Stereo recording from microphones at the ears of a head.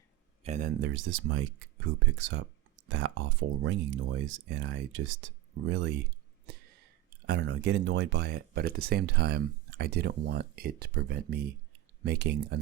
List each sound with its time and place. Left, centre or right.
0.4 s speech: right